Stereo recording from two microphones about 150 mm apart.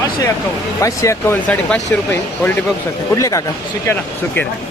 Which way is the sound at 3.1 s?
20° left (ahead or behind).